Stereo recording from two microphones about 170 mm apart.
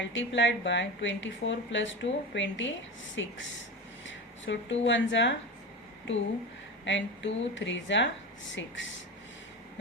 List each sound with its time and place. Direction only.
0.0 s speech: 90° left
6.8 s speech: 90° left